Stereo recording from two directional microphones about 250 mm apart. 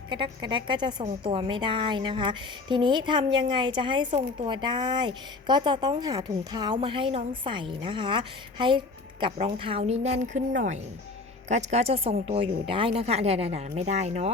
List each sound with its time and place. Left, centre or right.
0.1 s a woman's voice: centre
11.4 s a woman's voice: right